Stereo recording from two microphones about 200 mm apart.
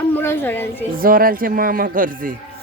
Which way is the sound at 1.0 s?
45° right (ahead or behind).